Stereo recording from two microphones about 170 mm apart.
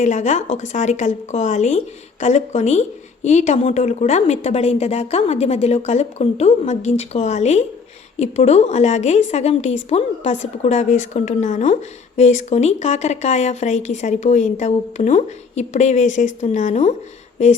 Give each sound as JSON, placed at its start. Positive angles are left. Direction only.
{"t": 0.0, "sound": "a woman's voice", "side_deg": 45}